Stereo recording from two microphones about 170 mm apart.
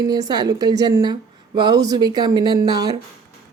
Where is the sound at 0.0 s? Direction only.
25° right (ahead or behind).